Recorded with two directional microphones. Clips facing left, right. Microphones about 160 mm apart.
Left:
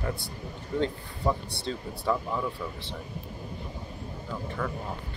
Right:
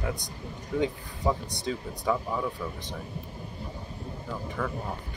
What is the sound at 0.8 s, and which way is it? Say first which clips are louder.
Speech: right 1 dB; 10° right (ahead or behind).